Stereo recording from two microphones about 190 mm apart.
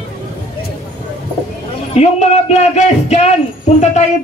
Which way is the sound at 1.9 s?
35° left (ahead or behind).